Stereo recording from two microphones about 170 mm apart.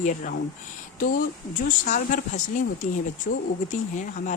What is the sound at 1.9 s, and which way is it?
Speech, 45° left (ahead or behind).